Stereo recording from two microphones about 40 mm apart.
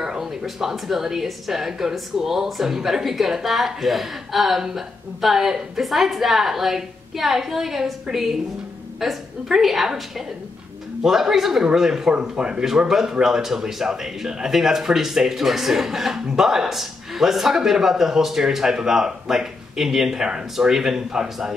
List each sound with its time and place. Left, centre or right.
0.4 s a woman's voice: centre
12.1 s speech: right
12.6 s a man's voice: centre